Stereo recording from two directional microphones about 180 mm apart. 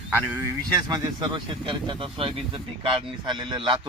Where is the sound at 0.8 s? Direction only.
20° right (ahead or behind).